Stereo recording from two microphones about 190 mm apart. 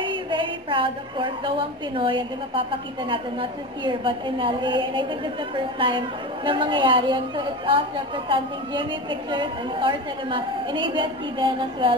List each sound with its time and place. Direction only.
0.0 s a woman's voice: 25° right (ahead or behind)